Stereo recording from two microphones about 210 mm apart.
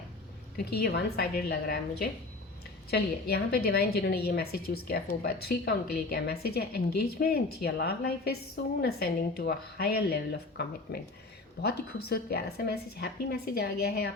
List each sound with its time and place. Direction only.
0.6 s a woman's voice: 50° left (ahead or behind)